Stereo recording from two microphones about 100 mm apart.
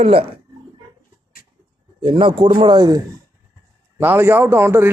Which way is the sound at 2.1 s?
60° right (ahead or behind).